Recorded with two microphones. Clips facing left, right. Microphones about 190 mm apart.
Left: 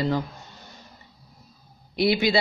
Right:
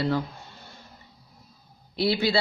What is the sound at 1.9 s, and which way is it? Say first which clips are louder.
Speech: left 2 dB; 15° left (ahead or behind).